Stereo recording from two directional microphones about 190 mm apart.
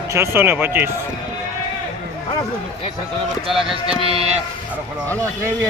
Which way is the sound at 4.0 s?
30° right (ahead or behind).